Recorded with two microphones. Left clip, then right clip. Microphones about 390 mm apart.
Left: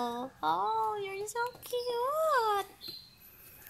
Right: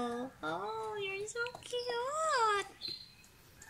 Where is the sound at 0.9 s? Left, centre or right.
Left.